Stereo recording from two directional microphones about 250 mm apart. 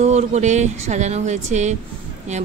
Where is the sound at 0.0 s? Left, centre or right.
Right.